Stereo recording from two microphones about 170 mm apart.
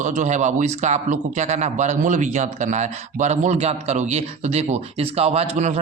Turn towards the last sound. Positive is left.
turn(degrees=-40)  # may be behind; listen again after turning